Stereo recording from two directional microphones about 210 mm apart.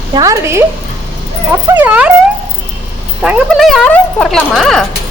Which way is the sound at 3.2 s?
5° right (ahead or behind).